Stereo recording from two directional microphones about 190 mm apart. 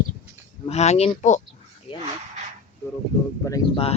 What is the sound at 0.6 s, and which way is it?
Speech, 35° left (ahead or behind).